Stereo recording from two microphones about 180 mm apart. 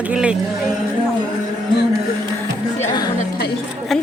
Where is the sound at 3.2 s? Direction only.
60° left (ahead or behind).